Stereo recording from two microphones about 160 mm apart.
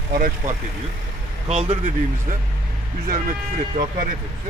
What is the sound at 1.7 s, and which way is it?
Speech, 55° right (ahead or behind).